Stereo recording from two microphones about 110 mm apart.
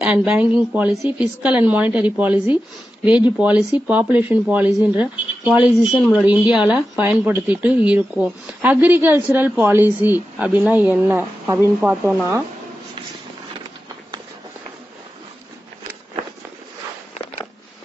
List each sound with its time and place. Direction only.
0.0 s speech: 10° right (ahead or behind)